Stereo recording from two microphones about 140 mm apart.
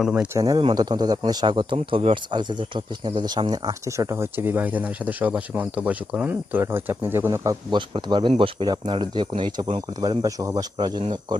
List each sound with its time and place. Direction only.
0.0 s speech: 10° right (ahead or behind)
0.3 s speech: 25° right (ahead or behind)
7.7 s speech: 35° right (ahead or behind)